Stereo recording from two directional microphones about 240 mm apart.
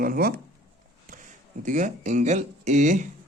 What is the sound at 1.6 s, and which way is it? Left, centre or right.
Speech, right.